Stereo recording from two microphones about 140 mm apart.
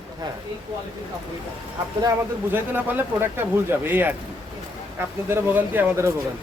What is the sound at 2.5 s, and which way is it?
Speech, 15° right (ahead or behind).